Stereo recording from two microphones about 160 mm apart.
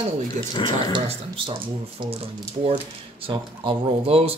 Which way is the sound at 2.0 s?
35° right (ahead or behind).